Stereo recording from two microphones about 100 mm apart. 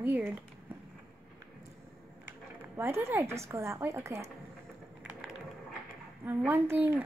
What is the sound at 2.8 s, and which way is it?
A woman's voice, 25° right (ahead or behind).